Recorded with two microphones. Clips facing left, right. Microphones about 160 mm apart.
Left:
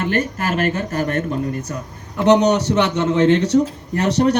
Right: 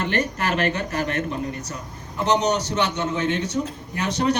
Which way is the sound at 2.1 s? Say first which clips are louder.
Left 7 dB; 65° left (ahead or behind).